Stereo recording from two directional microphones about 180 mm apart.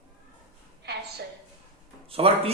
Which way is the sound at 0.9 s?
65° right (ahead or behind).